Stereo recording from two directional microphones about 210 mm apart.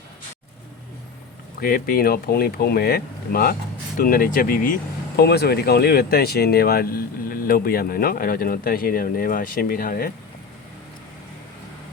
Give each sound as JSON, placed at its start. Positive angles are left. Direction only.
{"t": 1.6, "sound": "speech", "side_deg": 45}